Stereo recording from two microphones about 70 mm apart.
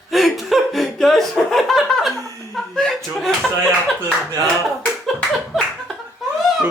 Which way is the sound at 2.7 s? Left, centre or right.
Centre.